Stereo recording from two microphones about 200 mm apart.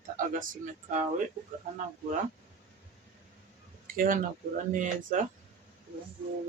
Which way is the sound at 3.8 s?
45° right (ahead or behind).